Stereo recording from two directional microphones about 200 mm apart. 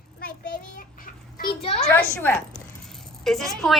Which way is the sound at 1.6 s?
30° left (ahead or behind).